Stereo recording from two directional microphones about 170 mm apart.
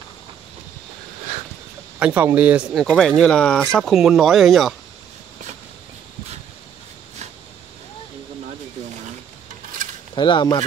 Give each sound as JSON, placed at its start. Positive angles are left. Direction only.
{"t": 2.0, "sound": "speech", "side_deg": -10}
{"t": 10.1, "sound": "speech", "side_deg": 25}